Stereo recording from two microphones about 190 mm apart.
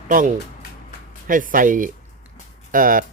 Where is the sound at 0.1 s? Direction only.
45° right (ahead or behind).